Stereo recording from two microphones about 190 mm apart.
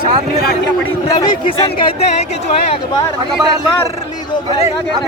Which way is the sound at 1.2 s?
25° left (ahead or behind).